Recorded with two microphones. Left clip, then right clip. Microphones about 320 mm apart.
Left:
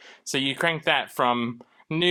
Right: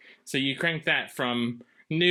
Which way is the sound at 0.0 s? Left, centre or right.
Centre.